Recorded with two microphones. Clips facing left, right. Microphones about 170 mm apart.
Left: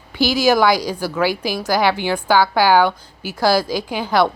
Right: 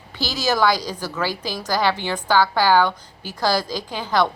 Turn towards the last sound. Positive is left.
turn(degrees=10)  # may be behind; listen again after turning